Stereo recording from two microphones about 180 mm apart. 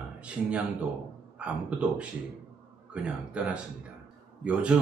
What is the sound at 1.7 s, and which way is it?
Speech, 5° right (ahead or behind).